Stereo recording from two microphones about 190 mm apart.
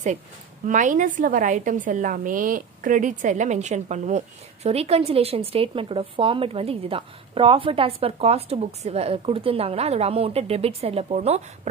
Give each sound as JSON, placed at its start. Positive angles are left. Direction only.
{"t": 0.7, "sound": "a woman's voice", "side_deg": -40}